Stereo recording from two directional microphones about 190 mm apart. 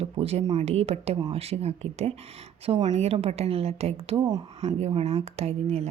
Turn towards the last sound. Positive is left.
turn(degrees=-35)  # may be behind; listen again after turning